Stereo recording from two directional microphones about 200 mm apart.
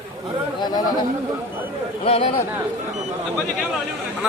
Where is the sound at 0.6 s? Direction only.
20° left (ahead or behind).